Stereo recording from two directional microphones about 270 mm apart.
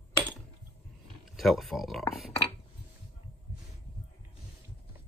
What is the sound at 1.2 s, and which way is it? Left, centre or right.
Speech, centre.